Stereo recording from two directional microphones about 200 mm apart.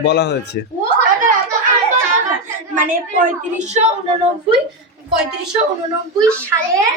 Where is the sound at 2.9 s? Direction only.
40° right (ahead or behind).